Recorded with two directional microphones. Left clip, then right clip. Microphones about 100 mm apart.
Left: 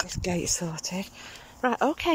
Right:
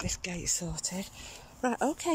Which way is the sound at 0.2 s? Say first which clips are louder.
Left 8 dB; 50° left (ahead or behind).